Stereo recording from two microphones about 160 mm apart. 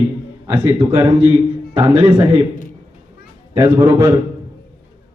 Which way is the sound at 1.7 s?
30° right (ahead or behind).